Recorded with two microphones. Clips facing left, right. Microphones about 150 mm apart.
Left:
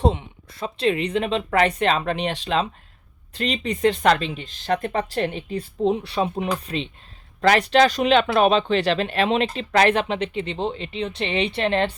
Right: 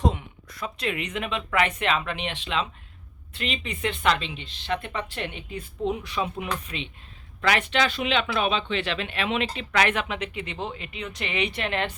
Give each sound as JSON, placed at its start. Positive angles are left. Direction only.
{"t": 0.0, "sound": "speech", "side_deg": 30}